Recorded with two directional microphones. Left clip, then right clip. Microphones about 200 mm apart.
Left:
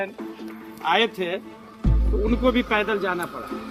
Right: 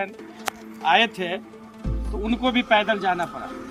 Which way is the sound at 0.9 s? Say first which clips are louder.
Right 2 dB; 15° right (ahead or behind).